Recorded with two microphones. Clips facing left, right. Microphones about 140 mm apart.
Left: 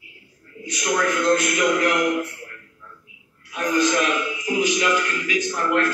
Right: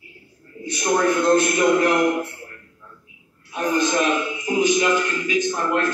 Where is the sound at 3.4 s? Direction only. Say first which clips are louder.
Even; 25° right (ahead or behind).